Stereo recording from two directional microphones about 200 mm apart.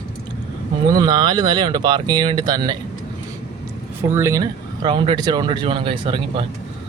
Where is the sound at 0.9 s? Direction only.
20° right (ahead or behind).